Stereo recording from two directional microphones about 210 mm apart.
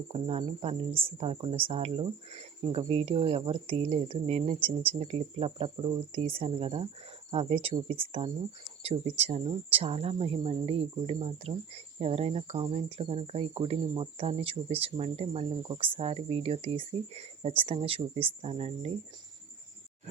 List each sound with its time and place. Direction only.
0.1 s speech: 30° right (ahead or behind)